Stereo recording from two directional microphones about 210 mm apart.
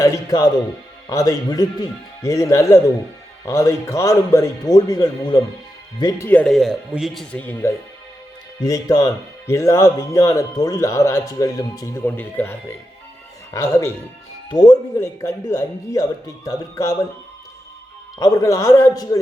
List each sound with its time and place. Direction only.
0.0 s speech: 15° left (ahead or behind)
18.2 s speech: 15° left (ahead or behind)